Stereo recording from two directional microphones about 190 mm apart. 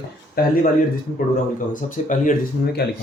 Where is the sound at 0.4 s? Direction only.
50° left (ahead or behind).